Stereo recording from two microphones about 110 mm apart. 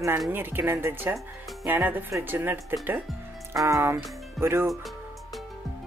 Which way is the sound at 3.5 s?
30° right (ahead or behind).